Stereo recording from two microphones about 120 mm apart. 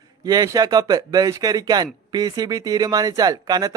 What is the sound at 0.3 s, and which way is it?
Speech, 30° right (ahead or behind).